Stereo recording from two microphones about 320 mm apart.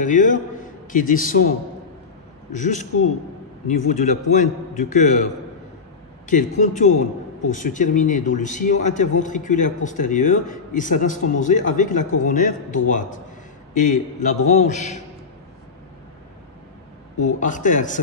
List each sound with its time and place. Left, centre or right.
0.0 s a man's voice: left
2.5 s a man's voice: left
6.2 s a man's voice: left
17.2 s a man's voice: left